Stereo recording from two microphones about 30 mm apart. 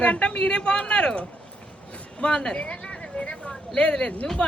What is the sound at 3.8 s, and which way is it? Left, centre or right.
Speech, left.